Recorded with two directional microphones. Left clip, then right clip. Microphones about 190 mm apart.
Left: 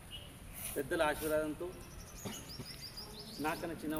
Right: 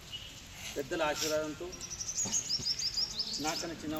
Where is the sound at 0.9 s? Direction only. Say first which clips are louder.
Right 1 dB; 10° left (ahead or behind).